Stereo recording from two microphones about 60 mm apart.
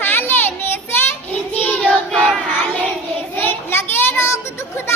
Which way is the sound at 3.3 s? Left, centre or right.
Left.